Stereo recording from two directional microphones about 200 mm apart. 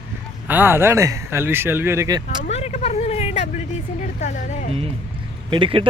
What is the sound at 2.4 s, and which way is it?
Speech, 35° left (ahead or behind).